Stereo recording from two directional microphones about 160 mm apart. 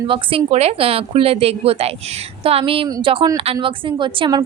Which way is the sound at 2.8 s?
25° right (ahead or behind).